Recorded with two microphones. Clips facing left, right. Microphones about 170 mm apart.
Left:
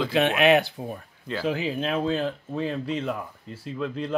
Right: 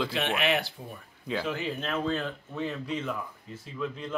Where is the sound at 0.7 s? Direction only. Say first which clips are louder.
Left 9 dB; 90° left.